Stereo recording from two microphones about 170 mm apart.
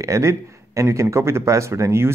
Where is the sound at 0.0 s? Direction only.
15° right (ahead or behind).